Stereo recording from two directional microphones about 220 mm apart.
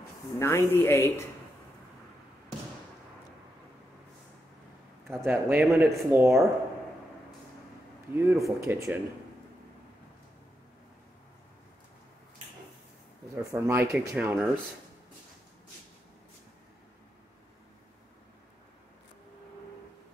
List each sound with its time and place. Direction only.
0.4 s speech: 10° left (ahead or behind)
5.2 s speech: 10° right (ahead or behind)
8.1 s speech: 10° right (ahead or behind)
13.4 s speech: 15° right (ahead or behind)